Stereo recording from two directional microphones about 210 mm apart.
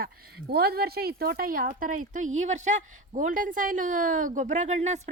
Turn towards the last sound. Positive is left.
turn(degrees=-35)  # may be behind; listen again after turning